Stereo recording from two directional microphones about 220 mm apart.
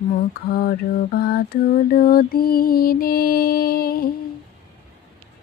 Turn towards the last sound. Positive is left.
turn(degrees=40)  # may be behind; listen again after turning